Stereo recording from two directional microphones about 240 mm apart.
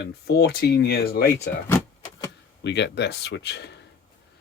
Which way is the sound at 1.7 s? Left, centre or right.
Centre.